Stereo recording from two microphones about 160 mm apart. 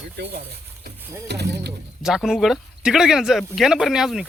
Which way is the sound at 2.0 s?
5° right (ahead or behind).